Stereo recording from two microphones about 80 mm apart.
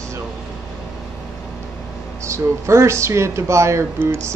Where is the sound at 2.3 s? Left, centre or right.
Right.